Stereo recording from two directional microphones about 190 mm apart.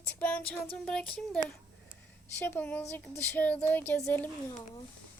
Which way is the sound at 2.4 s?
10° left (ahead or behind).